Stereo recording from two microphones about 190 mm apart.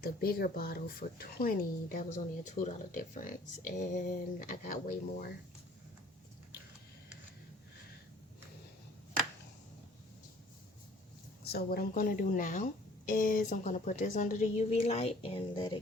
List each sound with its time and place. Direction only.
0.0 s speech: 50° left (ahead or behind)
11.4 s a woman's voice: 55° left (ahead or behind); by 15.8 s 25° left (ahead or behind)